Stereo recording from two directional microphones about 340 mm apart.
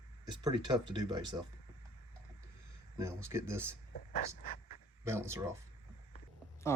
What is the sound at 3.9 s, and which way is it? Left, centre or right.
Speech, left.